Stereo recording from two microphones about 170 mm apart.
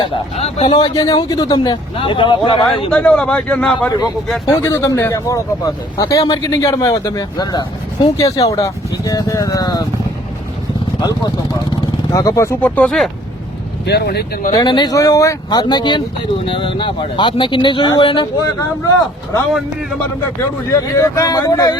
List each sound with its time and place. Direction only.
0.0 s speech: 35° left (ahead or behind)
0.7 s speech: 25° left (ahead or behind)
2.9 s a man's voice: 5° left (ahead or behind); by 9.8 s 25° left (ahead or behind)
11.0 s a man's voice: 20° left (ahead or behind); by 13.1 s 5° left (ahead or behind)
13.8 s speech: 75° left (ahead or behind)
14.5 s speech: 25° left (ahead or behind)
20.7 s speech: 15° left (ahead or behind)